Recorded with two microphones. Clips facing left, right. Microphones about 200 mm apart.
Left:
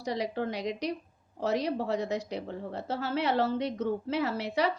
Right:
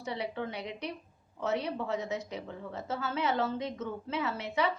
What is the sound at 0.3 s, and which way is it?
A woman's voice, 35° left (ahead or behind).